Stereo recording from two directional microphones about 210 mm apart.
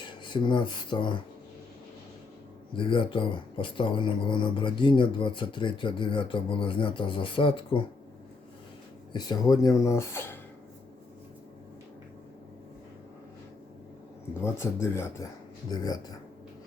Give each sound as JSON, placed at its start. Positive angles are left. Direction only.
{"t": 0.1, "sound": "speech", "side_deg": 20}
{"t": 2.7, "sound": "speech", "side_deg": 25}
{"t": 9.1, "sound": "speech", "side_deg": 20}
{"t": 14.4, "sound": "speech", "side_deg": 15}